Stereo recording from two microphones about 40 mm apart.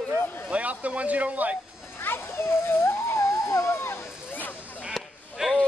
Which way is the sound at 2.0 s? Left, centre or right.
Left.